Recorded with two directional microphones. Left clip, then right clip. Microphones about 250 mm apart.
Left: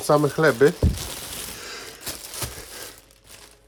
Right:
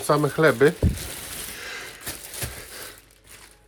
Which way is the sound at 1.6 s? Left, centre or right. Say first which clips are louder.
Right 2 dB; left.